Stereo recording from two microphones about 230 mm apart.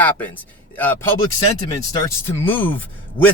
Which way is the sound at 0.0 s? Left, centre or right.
Centre.